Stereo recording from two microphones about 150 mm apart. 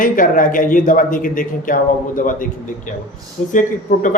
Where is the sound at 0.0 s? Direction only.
65° left (ahead or behind).